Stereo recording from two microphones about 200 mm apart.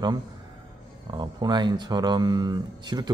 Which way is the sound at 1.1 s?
20° right (ahead or behind).